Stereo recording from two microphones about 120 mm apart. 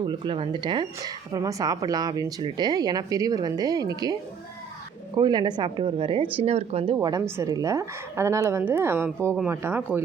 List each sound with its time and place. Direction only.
0.0 s a woman's voice: 45° right (ahead or behind)
6.3 s speech: 60° right (ahead or behind)
6.9 s speech: 30° right (ahead or behind)